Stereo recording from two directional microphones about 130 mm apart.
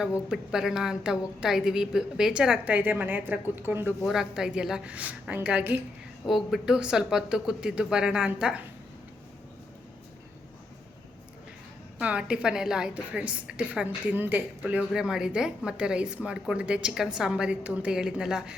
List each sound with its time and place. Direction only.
0.0 s a woman's voice: 5° right (ahead or behind)
4.0 s a woman's voice: 5° right (ahead or behind)
6.2 s a woman's voice: centre (ahead or behind)
11.9 s a woman's voice: 5° right (ahead or behind)